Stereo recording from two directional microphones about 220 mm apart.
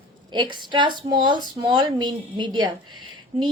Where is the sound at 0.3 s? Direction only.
20° right (ahead or behind).